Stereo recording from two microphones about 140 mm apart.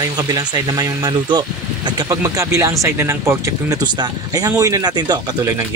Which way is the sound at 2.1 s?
20° right (ahead or behind).